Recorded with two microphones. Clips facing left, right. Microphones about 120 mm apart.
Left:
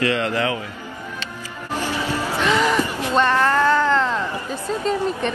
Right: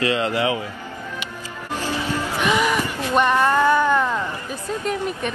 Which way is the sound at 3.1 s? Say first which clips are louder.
Right 1 dB; 15° right (ahead or behind).